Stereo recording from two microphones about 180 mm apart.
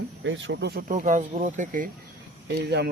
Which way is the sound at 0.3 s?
90° right.